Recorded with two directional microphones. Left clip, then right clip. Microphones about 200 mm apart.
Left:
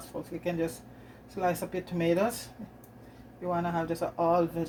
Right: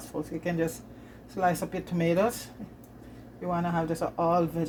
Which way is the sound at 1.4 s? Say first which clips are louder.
Right 3 dB; 35° right (ahead or behind).